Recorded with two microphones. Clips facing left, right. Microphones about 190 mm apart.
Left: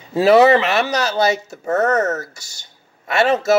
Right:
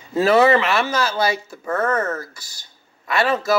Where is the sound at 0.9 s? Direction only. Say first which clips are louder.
Left 3 dB; 20° left (ahead or behind).